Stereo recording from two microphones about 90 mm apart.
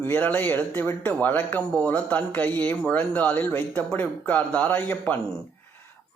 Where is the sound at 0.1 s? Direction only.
20° left (ahead or behind).